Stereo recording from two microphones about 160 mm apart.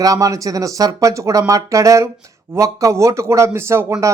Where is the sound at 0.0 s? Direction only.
20° right (ahead or behind).